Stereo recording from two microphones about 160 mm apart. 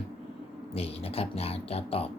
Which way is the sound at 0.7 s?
40° left (ahead or behind).